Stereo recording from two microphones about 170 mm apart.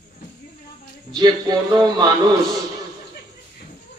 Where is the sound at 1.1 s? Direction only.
25° right (ahead or behind).